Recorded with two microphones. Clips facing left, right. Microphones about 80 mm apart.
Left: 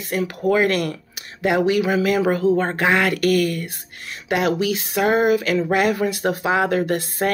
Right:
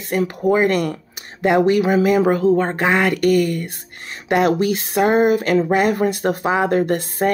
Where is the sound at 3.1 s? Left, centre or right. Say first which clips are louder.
Right 2 dB; left.